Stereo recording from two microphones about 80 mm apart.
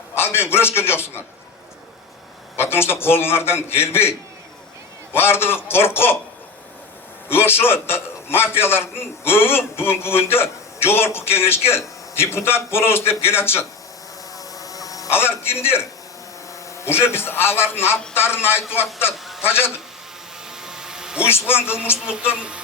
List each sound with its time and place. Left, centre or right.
0.1 s a man's voice: left
2.6 s a man's voice: left
5.1 s a man's voice: left
7.3 s a man's voice: left
14.3 s insect: left
15.1 s a man's voice: left
19.1 s a sound: centre
19.5 s a man's voice: left
20.6 s a sound: centre
21.2 s a man's voice: left
22.0 s speech: centre